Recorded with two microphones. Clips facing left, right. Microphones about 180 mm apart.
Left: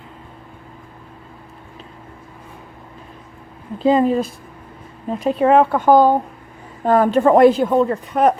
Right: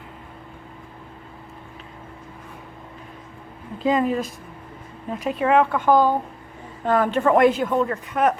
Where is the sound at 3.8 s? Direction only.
30° left (ahead or behind).